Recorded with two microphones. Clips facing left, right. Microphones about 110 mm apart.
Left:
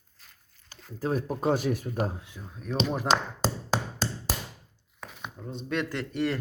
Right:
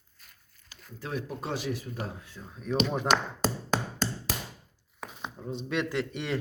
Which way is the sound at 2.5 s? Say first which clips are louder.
Right 1 dB; centre (ahead or behind).